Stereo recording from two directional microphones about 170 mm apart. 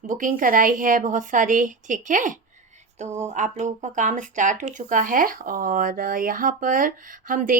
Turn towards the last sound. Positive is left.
turn(degrees=-50)  # may be behind; listen again after turning